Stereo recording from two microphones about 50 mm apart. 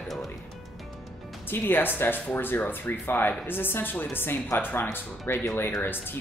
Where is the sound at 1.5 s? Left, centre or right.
Left.